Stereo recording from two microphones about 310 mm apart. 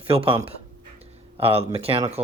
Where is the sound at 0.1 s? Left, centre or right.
Centre.